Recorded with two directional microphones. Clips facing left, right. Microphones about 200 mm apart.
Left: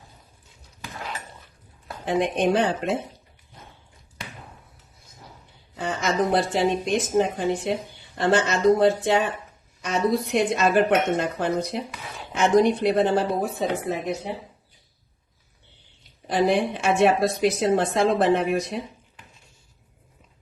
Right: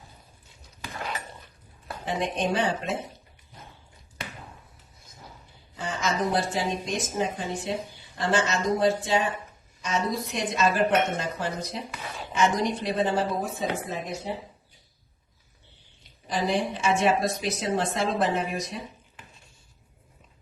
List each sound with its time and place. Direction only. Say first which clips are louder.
2.0 s a woman's voice: left 6 dB; 55° left (ahead or behind)
5.7 s a woman's voice: left 4 dB; 60° left (ahead or behind)
16.2 s a woman's voice: left 5 dB; 55° left (ahead or behind)